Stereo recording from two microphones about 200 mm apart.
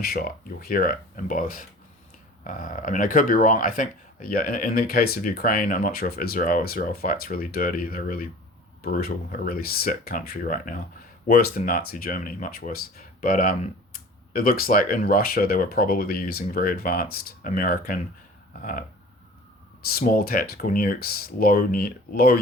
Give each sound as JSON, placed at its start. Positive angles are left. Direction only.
{"t": 0.0, "sound": "speech", "side_deg": 45}
{"t": 19.9, "sound": "speech", "side_deg": 45}